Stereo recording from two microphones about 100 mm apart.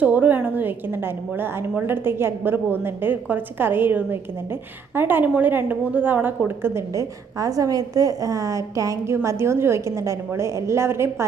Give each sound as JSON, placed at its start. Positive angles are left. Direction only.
{"t": 0.0, "sound": "a woman's voice", "side_deg": -15}